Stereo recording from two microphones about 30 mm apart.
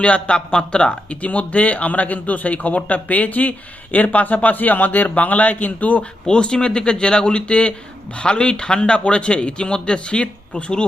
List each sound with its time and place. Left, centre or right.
0.0 s a man's voice: left
1.1 s a man's voice: left
6.2 s a man's voice: left